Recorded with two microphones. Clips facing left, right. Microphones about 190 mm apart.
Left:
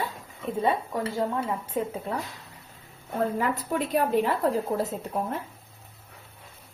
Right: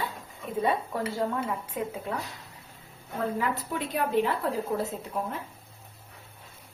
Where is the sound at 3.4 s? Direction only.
45° left (ahead or behind).